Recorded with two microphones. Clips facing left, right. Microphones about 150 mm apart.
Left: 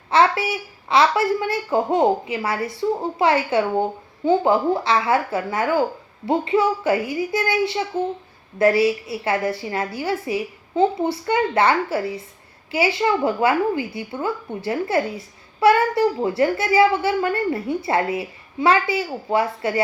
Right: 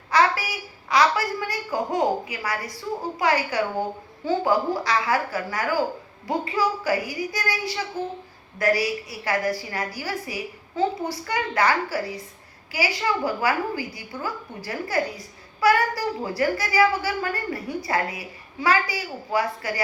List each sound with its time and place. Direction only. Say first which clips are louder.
0.1 s a child's voice: left 4 dB; 25° left (ahead or behind)